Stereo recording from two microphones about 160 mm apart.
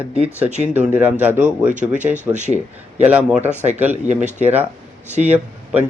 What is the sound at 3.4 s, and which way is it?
Speech, 45° right (ahead or behind).